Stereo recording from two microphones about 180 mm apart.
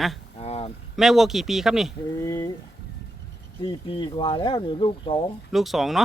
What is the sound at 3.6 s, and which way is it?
Speech, 30° left (ahead or behind).